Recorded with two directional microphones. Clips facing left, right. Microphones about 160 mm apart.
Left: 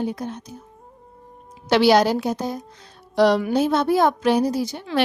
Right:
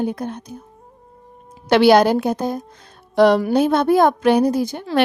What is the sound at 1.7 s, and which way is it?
A woman's voice, 55° right (ahead or behind).